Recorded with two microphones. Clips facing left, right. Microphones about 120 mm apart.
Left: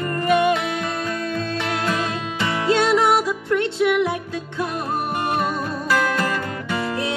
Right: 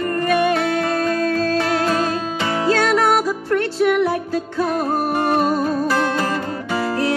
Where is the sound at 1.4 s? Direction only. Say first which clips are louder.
Right 6 dB; 35° right (ahead or behind).